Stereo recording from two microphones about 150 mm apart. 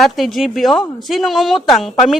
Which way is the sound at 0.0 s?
Centre (ahead or behind).